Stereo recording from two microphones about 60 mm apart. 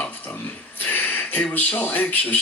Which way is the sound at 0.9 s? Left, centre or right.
Left.